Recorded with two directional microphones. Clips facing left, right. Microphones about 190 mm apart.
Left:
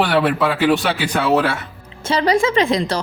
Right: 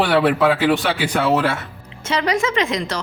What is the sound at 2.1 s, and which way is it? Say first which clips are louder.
Speech: left 4 dB; 30° left (ahead or behind).